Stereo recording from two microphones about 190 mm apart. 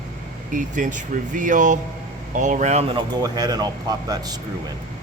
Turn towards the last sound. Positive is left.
turn(degrees=-20)  # may be behind; listen again after turning